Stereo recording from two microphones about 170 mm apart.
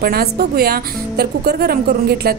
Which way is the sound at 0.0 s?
65° right (ahead or behind).